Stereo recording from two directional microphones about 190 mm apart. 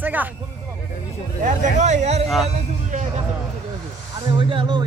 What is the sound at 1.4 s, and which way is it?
Speech, 40° right (ahead or behind).